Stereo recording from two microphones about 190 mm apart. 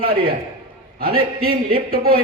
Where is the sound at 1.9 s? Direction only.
55° right (ahead or behind).